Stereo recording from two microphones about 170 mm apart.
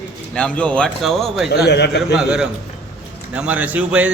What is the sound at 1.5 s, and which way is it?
Speech, 75° left (ahead or behind).